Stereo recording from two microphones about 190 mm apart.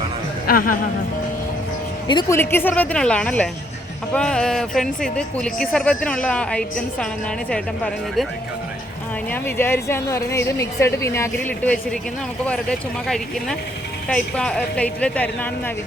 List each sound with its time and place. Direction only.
0.4 s a man's voice: 50° left (ahead or behind)
2.0 s speech: 25° left (ahead or behind)
2.4 s a woman's voice: 10° left (ahead or behind)
9.3 s a woman's voice: 10° left (ahead or behind)
13.1 s a woman's voice: 5° left (ahead or behind)